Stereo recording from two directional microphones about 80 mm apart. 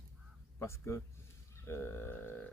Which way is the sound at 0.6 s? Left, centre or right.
Left.